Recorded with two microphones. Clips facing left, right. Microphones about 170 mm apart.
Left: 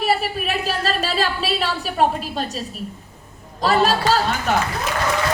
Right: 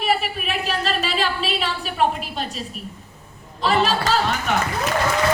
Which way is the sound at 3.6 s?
40° left (ahead or behind).